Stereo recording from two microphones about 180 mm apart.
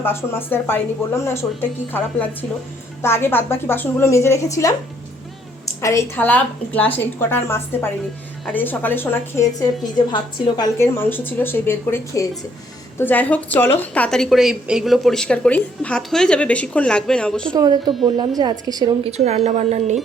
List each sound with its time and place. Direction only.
0.0 s a woman's voice: 15° left (ahead or behind)
5.8 s a woman's voice: 15° left (ahead or behind)
10.8 s a woman's voice: 10° left (ahead or behind)
17.5 s a woman's voice: 25° right (ahead or behind)
19.1 s a woman's voice: 35° right (ahead or behind)